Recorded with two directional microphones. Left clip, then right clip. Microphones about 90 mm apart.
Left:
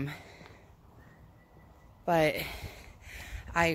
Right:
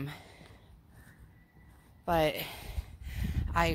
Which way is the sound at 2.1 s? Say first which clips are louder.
Left 2 dB; 30° left (ahead or behind).